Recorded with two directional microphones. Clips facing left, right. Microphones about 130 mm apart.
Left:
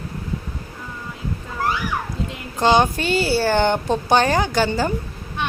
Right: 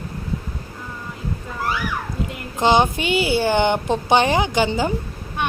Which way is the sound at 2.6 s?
15° right (ahead or behind).